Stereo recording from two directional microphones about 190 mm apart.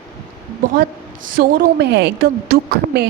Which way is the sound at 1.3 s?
55° right (ahead or behind).